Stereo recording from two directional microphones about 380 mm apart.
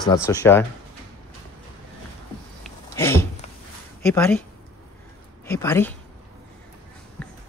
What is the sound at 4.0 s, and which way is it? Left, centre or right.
Speech, centre.